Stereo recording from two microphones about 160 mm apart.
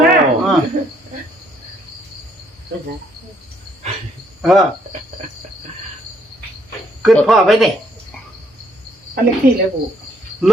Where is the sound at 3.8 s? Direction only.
45° right (ahead or behind).